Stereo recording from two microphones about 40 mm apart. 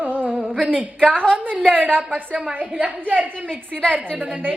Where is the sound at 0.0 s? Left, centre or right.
Right.